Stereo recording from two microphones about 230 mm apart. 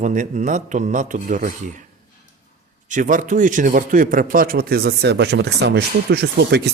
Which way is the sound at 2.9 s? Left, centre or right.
Right.